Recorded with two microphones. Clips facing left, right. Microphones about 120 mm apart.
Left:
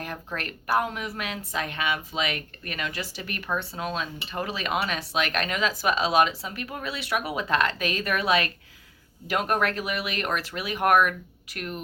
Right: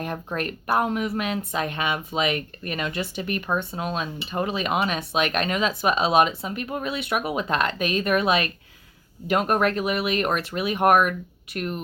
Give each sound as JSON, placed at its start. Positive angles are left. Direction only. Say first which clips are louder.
{"t": 0.0, "sound": "speech", "louder": "right 6 dB", "side_deg": -25}